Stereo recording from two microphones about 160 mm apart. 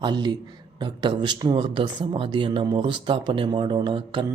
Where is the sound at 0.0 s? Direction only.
25° right (ahead or behind).